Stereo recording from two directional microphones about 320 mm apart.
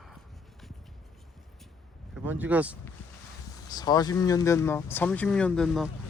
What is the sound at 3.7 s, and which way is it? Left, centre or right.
Speech, centre.